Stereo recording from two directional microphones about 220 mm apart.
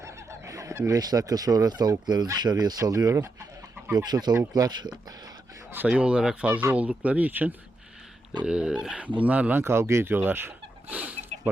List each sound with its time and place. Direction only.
0.0 s speech: 15° right (ahead or behind)
5.7 s speech: 5° right (ahead or behind)